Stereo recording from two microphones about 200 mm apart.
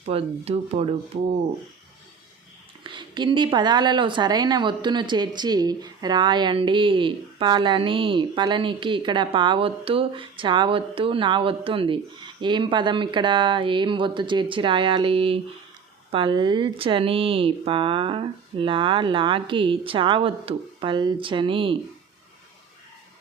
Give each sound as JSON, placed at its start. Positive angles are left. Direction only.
{"t": 0.0, "sound": "speech", "side_deg": -30}
{"t": 2.8, "sound": "speech", "side_deg": -25}